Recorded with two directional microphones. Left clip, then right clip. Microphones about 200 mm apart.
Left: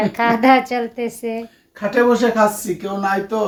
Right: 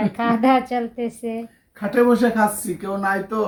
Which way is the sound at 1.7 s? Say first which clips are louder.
Left 2 dB; centre (ahead or behind).